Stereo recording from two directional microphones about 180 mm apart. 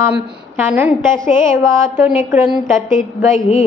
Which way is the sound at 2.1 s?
10° right (ahead or behind).